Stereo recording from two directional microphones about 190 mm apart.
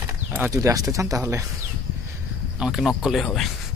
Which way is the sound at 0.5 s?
15° right (ahead or behind).